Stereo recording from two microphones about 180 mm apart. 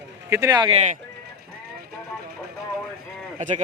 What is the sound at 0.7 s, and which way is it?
Speech, 40° right (ahead or behind).